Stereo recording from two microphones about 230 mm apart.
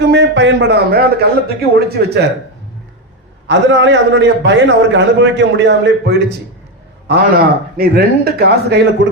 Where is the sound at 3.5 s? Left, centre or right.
Right.